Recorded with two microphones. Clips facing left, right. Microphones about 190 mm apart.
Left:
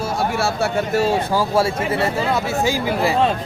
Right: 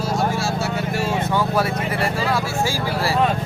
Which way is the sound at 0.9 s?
35° left (ahead or behind).